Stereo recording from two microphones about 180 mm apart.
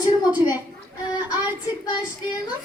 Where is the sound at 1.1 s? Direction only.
25° left (ahead or behind).